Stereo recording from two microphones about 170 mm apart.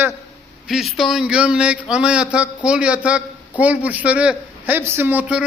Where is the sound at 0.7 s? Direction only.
Centre (ahead or behind).